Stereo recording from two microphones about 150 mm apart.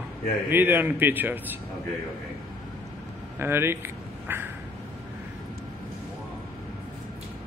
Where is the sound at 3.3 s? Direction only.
15° right (ahead or behind).